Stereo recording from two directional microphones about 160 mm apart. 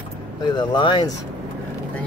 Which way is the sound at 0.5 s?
30° left (ahead or behind).